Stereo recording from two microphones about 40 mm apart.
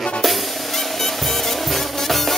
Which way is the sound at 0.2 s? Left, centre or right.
Centre.